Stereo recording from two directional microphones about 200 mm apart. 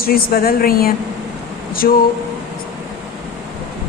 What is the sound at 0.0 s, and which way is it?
A woman's voice, 50° left (ahead or behind).